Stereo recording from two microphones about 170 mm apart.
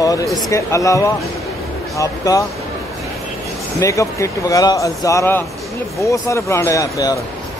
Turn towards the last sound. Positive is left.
turn(degrees=20)  # may be behind; listen again after turning